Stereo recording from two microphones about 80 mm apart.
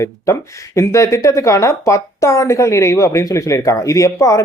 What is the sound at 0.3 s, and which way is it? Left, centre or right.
Speech, left.